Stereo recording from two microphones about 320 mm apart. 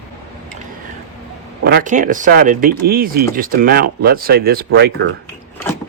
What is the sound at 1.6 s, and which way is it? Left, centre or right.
Speech, right.